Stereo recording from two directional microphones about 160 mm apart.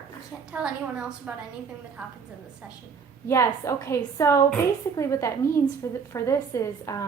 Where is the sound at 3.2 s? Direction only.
20° left (ahead or behind).